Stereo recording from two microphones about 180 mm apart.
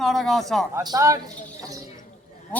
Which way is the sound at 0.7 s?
20° right (ahead or behind).